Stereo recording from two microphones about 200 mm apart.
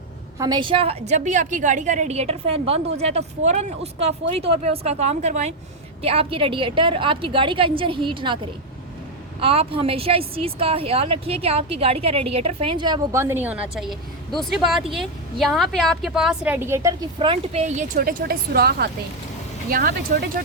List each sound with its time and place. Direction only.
0.3 s a woman's voice: 20° right (ahead or behind)
9.4 s a woman's voice: 30° right (ahead or behind); by 16.9 s 15° right (ahead or behind)
17.2 s a woman's voice: 30° right (ahead or behind); by 20.2 s 50° right (ahead or behind)